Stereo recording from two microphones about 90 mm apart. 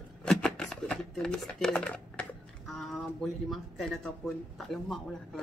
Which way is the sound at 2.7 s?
Centre (ahead or behind).